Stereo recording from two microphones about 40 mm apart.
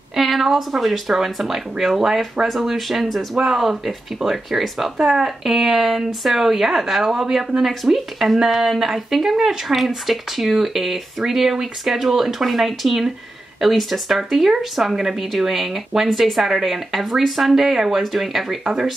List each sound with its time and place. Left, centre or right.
0.1 s a woman's voice: centre
18.6 s speech: centre